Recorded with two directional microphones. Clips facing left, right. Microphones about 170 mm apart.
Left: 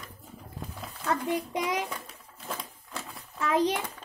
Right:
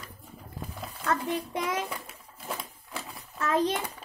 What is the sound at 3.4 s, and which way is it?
Speech, 10° left (ahead or behind).